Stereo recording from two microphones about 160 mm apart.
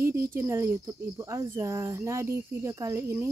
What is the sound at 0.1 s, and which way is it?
Speech, 15° right (ahead or behind).